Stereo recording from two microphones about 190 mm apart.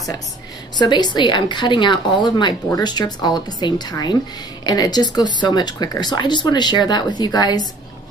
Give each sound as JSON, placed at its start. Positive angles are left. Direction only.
{"t": 0.7, "sound": "a woman's voice", "side_deg": 25}